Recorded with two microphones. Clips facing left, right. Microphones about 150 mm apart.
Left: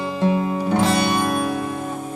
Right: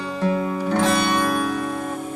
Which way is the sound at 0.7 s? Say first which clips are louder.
Left 1 dB; 25° left (ahead or behind).